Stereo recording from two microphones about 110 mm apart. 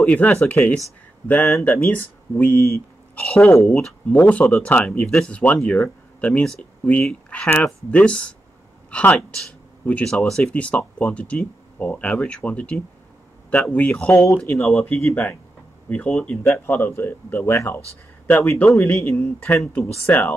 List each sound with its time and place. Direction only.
0.0 s speech: 10° left (ahead or behind)